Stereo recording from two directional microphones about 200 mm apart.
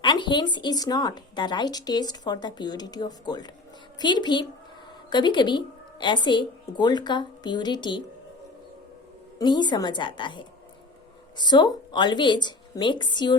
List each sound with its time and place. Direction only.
0.0 s speech: 25° left (ahead or behind)
9.4 s speech: 20° left (ahead or behind)